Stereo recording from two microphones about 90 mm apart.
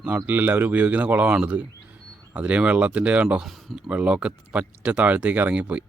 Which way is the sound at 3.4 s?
Centre (ahead or behind).